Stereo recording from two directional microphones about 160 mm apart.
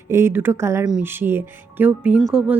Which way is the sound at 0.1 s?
15° right (ahead or behind).